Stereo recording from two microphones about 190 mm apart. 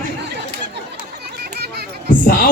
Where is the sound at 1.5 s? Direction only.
55° right (ahead or behind).